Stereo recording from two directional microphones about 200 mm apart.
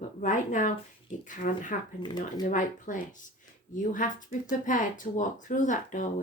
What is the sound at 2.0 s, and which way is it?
Speech, 25° left (ahead or behind).